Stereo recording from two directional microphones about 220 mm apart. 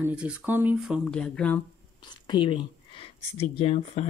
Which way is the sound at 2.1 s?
20° left (ahead or behind).